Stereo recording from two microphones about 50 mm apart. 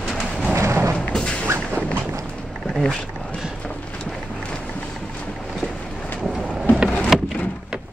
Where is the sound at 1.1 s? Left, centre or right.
Centre.